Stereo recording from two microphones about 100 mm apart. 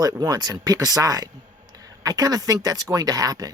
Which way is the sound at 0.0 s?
40° right (ahead or behind).